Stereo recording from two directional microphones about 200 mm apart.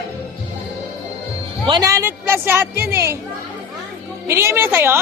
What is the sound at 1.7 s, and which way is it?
Speech, 15° right (ahead or behind).